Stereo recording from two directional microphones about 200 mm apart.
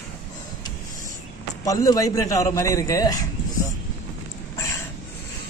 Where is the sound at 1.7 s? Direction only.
15° left (ahead or behind).